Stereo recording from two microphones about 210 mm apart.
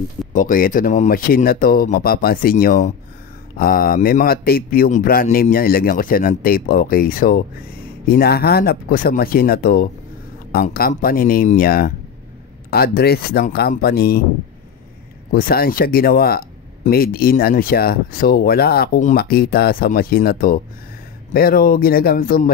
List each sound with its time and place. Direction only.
0.3 s speech: 40° left (ahead or behind)
15.3 s speech: 45° left (ahead or behind)